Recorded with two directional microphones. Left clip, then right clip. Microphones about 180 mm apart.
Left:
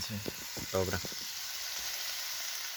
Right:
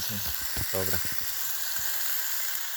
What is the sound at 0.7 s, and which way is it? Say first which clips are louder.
Speech: left 1 dB; 25° left (ahead or behind).